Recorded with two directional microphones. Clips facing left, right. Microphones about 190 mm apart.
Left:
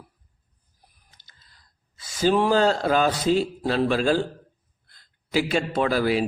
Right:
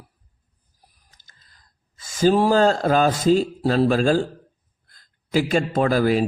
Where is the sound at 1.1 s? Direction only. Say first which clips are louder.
Even; 45° right (ahead or behind).